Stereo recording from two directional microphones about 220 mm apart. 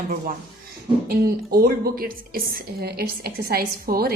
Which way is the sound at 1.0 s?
45° right (ahead or behind).